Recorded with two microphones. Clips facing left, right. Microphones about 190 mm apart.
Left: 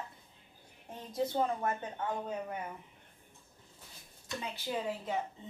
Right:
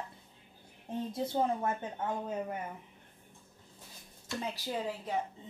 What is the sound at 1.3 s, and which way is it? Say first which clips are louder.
Speech: right 4 dB; 25° right (ahead or behind).